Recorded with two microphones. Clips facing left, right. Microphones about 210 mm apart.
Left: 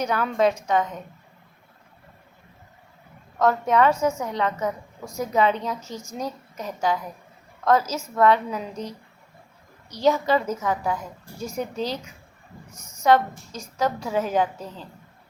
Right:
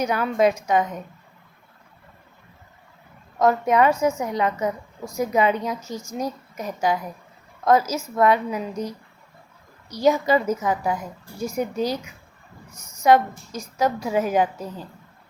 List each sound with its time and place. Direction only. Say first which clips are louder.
0.0 s a woman's voice: right 2 dB; 10° right (ahead or behind)
3.3 s a woman's voice: right 2 dB; 10° right (ahead or behind)
12.7 s a woman's voice: even; 30° left (ahead or behind)
13.1 s a woman's voice: right 2 dB; 10° right (ahead or behind)